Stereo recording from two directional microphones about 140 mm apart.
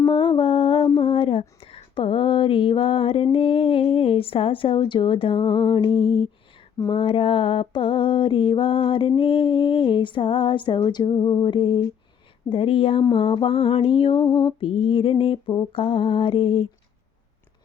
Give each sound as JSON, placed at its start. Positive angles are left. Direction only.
{"t": 0.0, "sound": "mantra", "side_deg": 35}
{"t": 0.9, "sound": "a sound", "side_deg": 40}
{"t": 3.3, "sound": "a woman's voice", "side_deg": 40}
{"t": 6.9, "sound": "mantra", "side_deg": 40}